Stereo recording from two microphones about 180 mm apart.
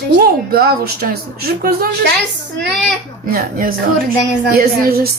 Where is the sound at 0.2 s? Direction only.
60° right (ahead or behind).